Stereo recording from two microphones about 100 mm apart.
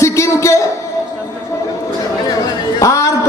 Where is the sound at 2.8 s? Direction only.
35° left (ahead or behind).